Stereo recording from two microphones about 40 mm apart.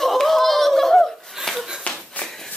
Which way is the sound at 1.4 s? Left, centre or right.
Centre.